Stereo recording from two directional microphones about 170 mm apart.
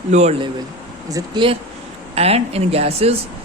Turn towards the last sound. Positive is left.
turn(degrees=-35)  # may be behind; listen again after turning